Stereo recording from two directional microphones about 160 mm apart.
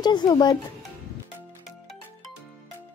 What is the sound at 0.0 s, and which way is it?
Speech, 25° left (ahead or behind).